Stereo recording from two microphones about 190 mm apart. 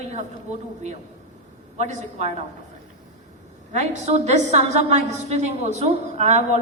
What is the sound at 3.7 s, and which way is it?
A woman's voice, 35° right (ahead or behind).